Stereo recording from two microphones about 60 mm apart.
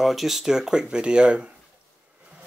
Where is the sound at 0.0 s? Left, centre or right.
Centre.